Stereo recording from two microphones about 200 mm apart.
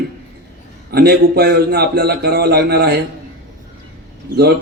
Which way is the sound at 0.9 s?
50° right (ahead or behind).